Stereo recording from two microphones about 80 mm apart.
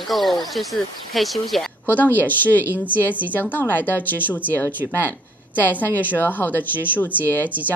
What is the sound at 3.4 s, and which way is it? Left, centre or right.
A woman's voice, left.